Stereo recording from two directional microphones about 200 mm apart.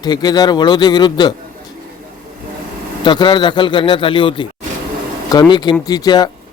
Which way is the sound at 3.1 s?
25° left (ahead or behind).